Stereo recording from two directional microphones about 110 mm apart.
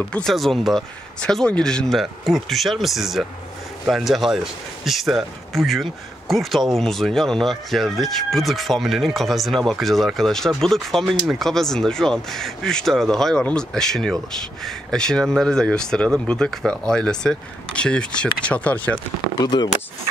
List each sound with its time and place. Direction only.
0.1 s speech: 5° left (ahead or behind)
19.4 s speech: 40° left (ahead or behind)